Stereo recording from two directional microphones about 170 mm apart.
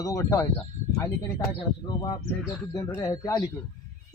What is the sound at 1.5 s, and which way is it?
A man's voice, 25° left (ahead or behind).